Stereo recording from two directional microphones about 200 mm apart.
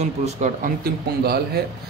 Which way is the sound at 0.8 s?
50° right (ahead or behind).